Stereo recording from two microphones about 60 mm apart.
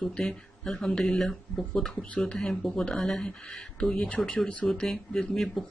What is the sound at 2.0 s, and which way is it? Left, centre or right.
Speech, left.